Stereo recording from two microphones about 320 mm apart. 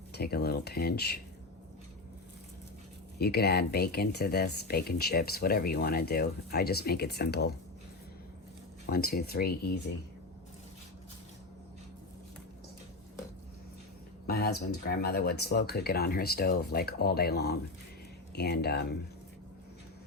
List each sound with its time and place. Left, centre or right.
0.1 s speech: left
3.2 s speech: left
8.9 s speech: left
14.3 s a sound: left
14.8 s speech: left